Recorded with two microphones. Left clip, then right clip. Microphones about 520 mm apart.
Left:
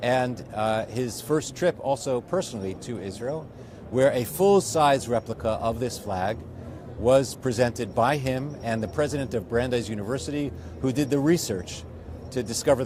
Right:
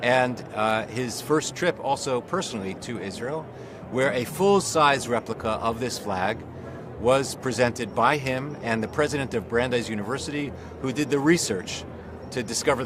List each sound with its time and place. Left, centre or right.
0.0 s speech: left